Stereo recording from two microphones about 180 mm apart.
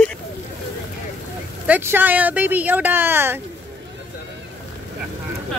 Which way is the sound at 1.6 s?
10° right (ahead or behind).